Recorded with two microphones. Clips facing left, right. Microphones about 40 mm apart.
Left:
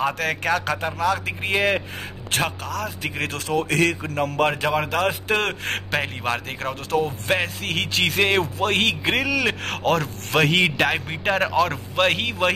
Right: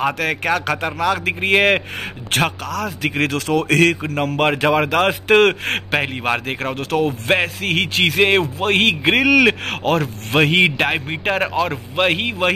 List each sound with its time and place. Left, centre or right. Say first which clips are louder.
0.0 s speech: right 3 dB; right
0.6 s speech: right 3 dB; right
4.1 s speech: right 3 dB; right
5.9 s speech: right 5 dB; right
6.9 s speech: right 3 dB; right
7.2 s speech: right 5 dB; right
9.2 s speech: right 12 dB; right
9.5 s speech: right 4 dB; right